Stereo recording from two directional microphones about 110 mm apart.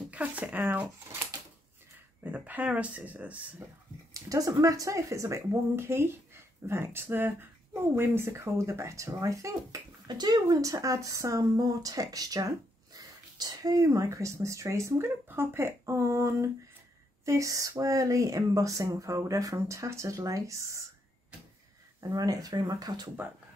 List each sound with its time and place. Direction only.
0.1 s speech: 15° right (ahead or behind)
2.3 s speech: 15° right (ahead or behind)
4.1 s speech: 30° right (ahead or behind)
22.1 s speech: 35° right (ahead or behind)